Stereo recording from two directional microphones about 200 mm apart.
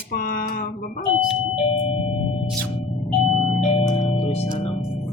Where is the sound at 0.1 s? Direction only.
45° left (ahead or behind).